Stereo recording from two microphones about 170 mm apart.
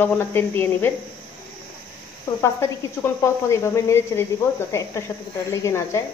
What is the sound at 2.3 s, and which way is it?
A woman's voice, 20° left (ahead or behind).